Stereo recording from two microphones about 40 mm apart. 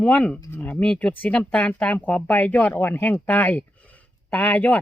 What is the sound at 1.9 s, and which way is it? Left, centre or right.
Speech, left.